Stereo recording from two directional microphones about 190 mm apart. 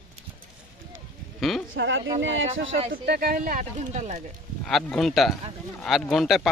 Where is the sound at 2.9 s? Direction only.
55° right (ahead or behind); by 4.2 s 35° right (ahead or behind).